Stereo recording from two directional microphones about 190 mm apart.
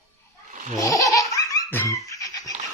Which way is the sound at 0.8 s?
15° left (ahead or behind).